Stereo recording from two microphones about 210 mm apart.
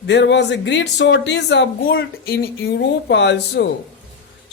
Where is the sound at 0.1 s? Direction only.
55° left (ahead or behind).